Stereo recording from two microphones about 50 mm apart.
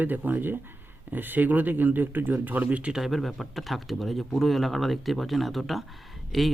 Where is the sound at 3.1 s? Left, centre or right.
Centre.